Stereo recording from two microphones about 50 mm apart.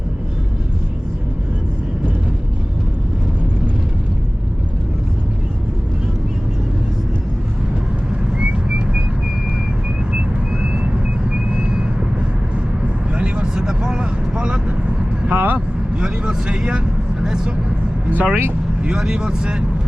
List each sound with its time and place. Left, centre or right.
8.4 s whistling: right
10.1 s vehicle: centre
13.1 s vehicle: right
15.3 s vehicle: right
15.5 s vehicle: right
18.1 s vehicle: right
18.8 s vehicle: centre